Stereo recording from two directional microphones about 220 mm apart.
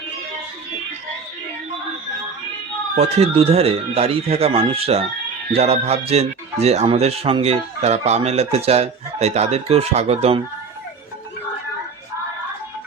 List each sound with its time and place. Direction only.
2.9 s speech: 30° right (ahead or behind)